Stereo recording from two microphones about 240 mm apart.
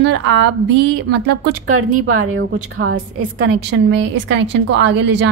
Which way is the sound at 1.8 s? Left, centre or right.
Right.